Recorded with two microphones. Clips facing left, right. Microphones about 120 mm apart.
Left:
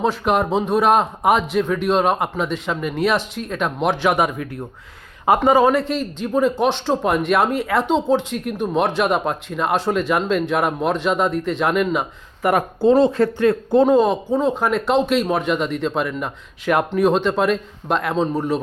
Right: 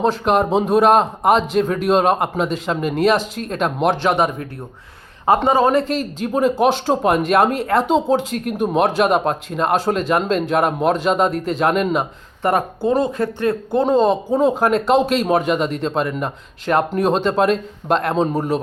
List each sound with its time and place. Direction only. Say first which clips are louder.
0.0 s speech: right 2 dB; 5° left (ahead or behind)
1.4 s speech: right 2 dB; 35° right (ahead or behind)
1.8 s speech: right 3 dB; centre (ahead or behind)
4.0 s speech: right 1 dB; 35° right (ahead or behind)
5.7 s speech: right 2 dB; centre (ahead or behind)
12.4 s speech: even; 30° right (ahead or behind)
12.8 s speech: left 6 dB; 25° left (ahead or behind)
13.2 s speech: left 3 dB; 20° right (ahead or behind)
13.7 s speech: even; 15° left (ahead or behind)
16.6 s speech: right 1 dB; 35° right (ahead or behind)
17.0 s speech: even; centre (ahead or behind)